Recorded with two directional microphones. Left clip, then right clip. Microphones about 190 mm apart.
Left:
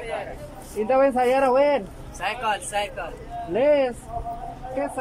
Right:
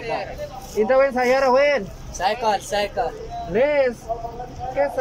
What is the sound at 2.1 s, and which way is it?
Speech, 20° right (ahead or behind).